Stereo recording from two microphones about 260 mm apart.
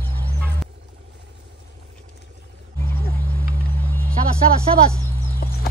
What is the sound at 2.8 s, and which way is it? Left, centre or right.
Music, centre.